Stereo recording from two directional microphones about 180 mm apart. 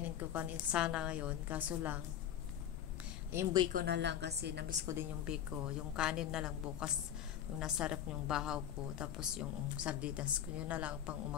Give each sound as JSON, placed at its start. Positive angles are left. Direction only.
{"t": 0.0, "sound": "a woman's voice", "side_deg": -10}
{"t": 3.3, "sound": "speech", "side_deg": -15}
{"t": 3.7, "sound": "a woman's voice", "side_deg": -70}
{"t": 5.3, "sound": "a woman's voice", "side_deg": -5}